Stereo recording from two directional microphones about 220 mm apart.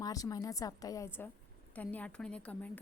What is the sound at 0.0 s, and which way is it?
A woman's voice, 15° left (ahead or behind).